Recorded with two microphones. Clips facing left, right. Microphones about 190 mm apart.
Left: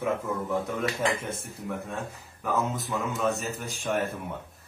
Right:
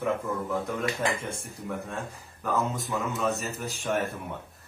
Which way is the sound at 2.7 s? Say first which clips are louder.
Even; centre (ahead or behind).